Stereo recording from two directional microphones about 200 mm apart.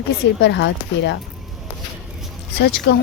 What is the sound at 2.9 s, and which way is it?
Speech, 55° left (ahead or behind).